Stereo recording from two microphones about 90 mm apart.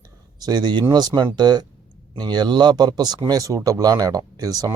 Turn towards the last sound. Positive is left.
turn(degrees=-40)  # may be behind; listen again after turning